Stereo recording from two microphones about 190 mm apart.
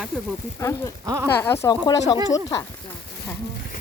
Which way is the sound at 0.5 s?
15° left (ahead or behind).